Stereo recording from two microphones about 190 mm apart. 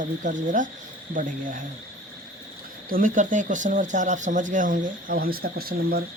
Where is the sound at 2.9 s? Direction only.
45° right (ahead or behind).